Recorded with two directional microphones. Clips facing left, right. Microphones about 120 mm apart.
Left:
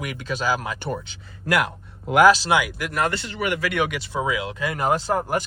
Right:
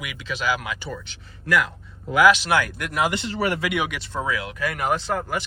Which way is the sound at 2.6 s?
Centre (ahead or behind).